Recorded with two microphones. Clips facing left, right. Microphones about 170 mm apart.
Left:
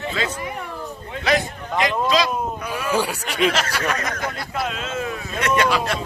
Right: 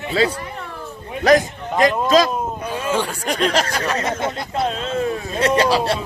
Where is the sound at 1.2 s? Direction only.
40° right (ahead or behind).